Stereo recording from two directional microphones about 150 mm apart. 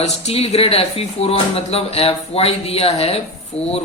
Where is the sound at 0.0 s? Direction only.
45° left (ahead or behind).